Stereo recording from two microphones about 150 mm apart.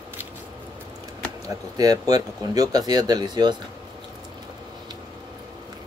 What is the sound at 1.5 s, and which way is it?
Speech, 25° right (ahead or behind).